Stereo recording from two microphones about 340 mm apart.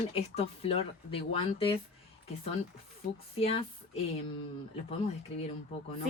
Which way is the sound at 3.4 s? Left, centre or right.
Centre.